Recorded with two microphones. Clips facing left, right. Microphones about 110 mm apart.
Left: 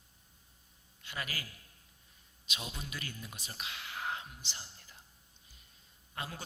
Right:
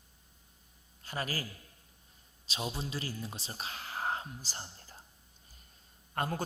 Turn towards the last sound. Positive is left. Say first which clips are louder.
# right 8 dB
turn(degrees=-50)  # may be behind; listen again after turning